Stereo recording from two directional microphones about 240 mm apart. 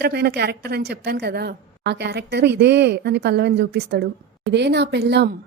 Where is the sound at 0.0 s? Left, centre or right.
Right.